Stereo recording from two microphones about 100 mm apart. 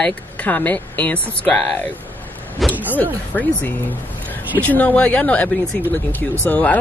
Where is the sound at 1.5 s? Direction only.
5° left (ahead or behind).